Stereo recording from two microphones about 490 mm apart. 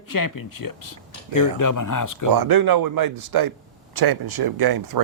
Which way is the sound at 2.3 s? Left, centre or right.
Right.